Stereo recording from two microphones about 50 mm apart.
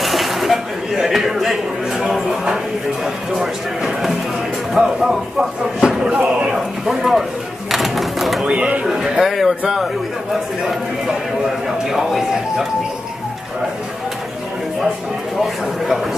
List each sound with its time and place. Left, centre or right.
0.0 s a sound: centre
4.7 s speech: centre
6.0 s a sound: right
6.9 s a man's voice: centre
7.7 s sewing machine: centre
8.5 s speech: right
8.8 s a man's voice: centre
11.6 s speech: centre
15.4 s a man's voice: centre